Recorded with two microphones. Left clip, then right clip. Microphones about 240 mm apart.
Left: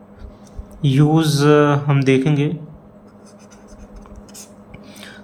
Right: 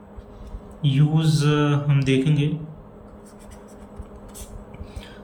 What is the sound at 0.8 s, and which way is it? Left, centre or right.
Speech, left.